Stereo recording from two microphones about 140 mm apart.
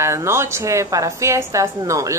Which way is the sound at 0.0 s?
20° right (ahead or behind).